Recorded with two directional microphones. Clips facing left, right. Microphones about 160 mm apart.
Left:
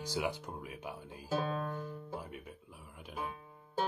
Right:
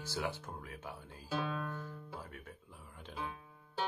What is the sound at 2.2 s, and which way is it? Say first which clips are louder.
Speech: left 3 dB; 15° left (ahead or behind).